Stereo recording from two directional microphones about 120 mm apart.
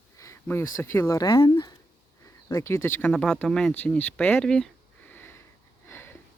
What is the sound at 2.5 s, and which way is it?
Speech, 25° left (ahead or behind).